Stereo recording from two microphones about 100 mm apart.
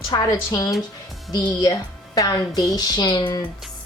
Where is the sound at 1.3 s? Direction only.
45° left (ahead or behind).